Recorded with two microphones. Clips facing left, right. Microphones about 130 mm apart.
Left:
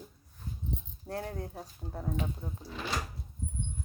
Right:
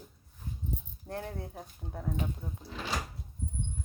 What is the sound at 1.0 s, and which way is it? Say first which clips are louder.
A woman's voice: left 2 dB; 40° left (ahead or behind).